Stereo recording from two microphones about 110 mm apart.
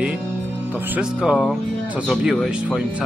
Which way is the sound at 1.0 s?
5° right (ahead or behind).